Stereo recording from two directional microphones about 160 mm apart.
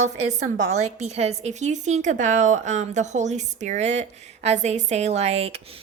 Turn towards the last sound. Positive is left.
turn(degrees=-35)  # may be behind; listen again after turning